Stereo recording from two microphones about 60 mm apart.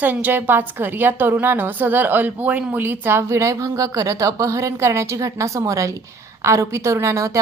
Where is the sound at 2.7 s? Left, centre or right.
Right.